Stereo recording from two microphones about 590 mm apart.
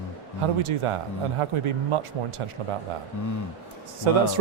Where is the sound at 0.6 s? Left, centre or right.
Right.